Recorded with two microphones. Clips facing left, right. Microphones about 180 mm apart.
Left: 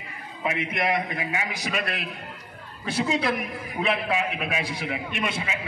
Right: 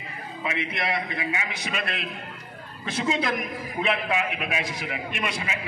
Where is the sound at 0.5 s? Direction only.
50° left (ahead or behind); by 4.9 s 30° left (ahead or behind).